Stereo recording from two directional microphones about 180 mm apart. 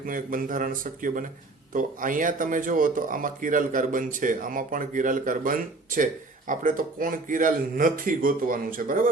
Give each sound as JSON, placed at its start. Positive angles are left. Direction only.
{"t": 0.0, "sound": "speech", "side_deg": -50}